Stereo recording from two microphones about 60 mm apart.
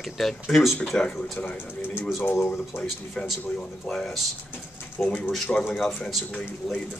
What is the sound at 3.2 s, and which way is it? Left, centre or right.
Speech, centre.